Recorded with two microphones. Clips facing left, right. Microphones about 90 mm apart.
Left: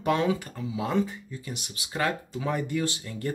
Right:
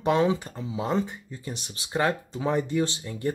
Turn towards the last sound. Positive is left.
turn(degrees=-20)  # may be behind; listen again after turning